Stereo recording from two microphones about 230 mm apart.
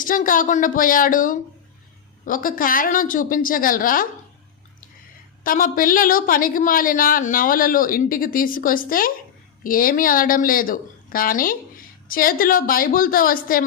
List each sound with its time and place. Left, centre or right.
0.0 s a woman's voice: left
5.4 s a woman's voice: left